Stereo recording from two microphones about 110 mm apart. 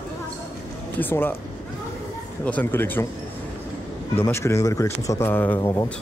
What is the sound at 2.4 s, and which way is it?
Speech, 15° left (ahead or behind).